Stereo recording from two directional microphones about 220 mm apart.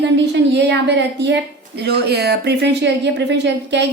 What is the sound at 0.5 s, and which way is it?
A woman's voice, 50° right (ahead or behind).